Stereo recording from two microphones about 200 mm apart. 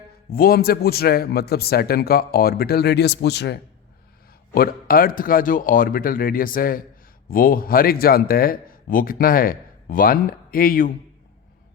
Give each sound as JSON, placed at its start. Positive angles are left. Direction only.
{"t": 0.3, "sound": "speech", "side_deg": 50}